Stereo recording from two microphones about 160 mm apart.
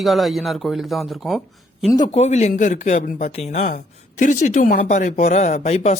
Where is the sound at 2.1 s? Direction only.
45° left (ahead or behind).